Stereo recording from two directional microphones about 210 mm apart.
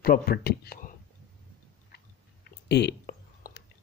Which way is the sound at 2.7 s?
55° left (ahead or behind).